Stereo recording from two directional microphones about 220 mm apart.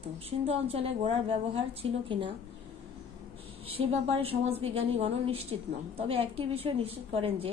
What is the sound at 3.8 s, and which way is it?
A woman's voice, 25° right (ahead or behind).